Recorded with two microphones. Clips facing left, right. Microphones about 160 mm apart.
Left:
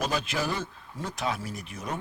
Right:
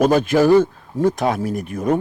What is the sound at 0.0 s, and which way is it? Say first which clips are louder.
A man's voice: right 15 dB; 50° right (ahead or behind).